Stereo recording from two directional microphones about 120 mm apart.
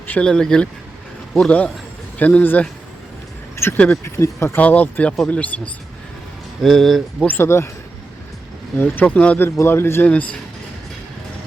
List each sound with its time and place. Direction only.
0.1 s speech: 10° left (ahead or behind)
3.5 s vehicle: 20° left (ahead or behind)
3.8 s speech: 20° left (ahead or behind)
6.6 s speech: centre (ahead or behind)
7.3 s a man's voice: 20° left (ahead or behind)
8.8 s a man's voice: 15° left (ahead or behind)